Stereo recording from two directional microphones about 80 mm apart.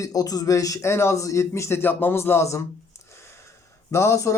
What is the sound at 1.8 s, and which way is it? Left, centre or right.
Speech, left.